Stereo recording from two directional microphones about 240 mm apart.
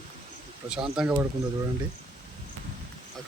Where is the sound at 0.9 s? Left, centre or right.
Centre.